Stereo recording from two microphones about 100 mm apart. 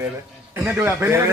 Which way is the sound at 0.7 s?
25° right (ahead or behind).